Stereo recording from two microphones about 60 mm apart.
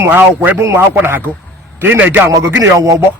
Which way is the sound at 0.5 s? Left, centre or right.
Right.